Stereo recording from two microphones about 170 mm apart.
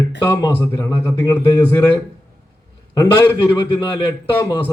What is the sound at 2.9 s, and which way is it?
Speech, 15° left (ahead or behind).